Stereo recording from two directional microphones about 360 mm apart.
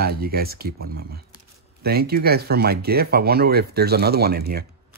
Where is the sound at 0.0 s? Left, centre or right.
Right.